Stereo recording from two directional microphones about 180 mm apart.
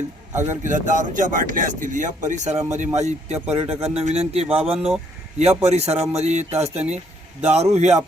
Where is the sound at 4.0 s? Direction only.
35° right (ahead or behind).